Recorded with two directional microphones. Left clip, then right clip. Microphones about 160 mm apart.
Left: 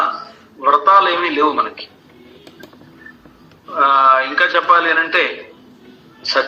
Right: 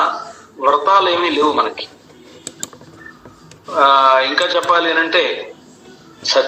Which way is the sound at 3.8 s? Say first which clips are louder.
Right 1 dB; 20° left (ahead or behind).